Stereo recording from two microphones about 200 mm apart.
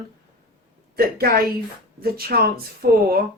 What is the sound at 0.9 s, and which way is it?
Speech, 50° right (ahead or behind).